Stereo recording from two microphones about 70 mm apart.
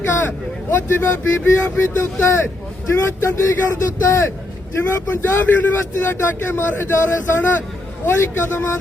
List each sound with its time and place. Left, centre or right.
0.0 s speech: left